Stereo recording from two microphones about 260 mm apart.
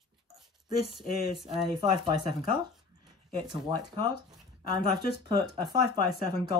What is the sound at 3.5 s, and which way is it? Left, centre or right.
A woman's voice, centre.